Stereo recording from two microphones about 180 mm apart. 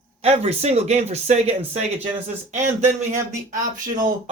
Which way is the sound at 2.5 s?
40° right (ahead or behind).